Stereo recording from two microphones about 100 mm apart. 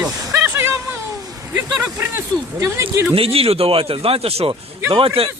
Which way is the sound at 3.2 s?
75° right (ahead or behind).